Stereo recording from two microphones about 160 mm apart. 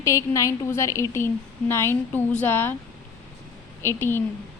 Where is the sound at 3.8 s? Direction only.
15° left (ahead or behind).